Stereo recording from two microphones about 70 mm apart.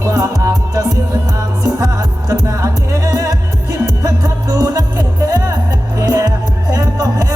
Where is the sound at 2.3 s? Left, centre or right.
Right.